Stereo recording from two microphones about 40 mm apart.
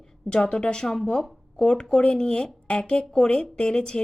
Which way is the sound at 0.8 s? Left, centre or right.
Centre.